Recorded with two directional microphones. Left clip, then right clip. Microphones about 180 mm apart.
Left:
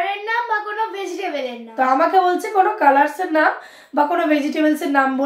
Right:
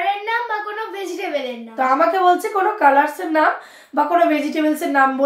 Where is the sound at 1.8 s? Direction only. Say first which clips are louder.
Left 1 dB; 15° left (ahead or behind).